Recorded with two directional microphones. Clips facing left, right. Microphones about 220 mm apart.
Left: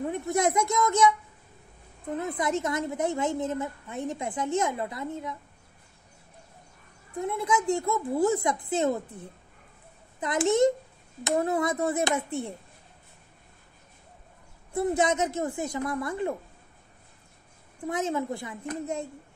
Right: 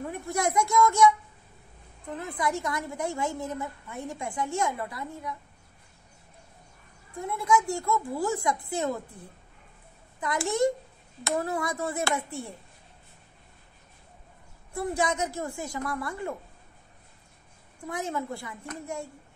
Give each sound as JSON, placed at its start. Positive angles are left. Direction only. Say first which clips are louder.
{"t": 0.1, "sound": "a woman's voice", "louder": "left 2 dB", "side_deg": 20}
{"t": 7.2, "sound": "a woman's voice", "louder": "right 1 dB", "side_deg": 20}
{"t": 10.2, "sound": "a woman's voice", "louder": "left 4 dB", "side_deg": 20}
{"t": 14.7, "sound": "a woman's voice", "louder": "left 4 dB", "side_deg": 20}
{"t": 17.8, "sound": "a woman's voice", "louder": "left 4 dB", "side_deg": 20}